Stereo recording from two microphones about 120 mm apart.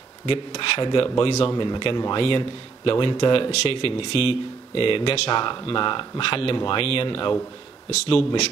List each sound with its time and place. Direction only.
0.3 s a man's voice: 45° left (ahead or behind)
7.9 s speech: 60° left (ahead or behind)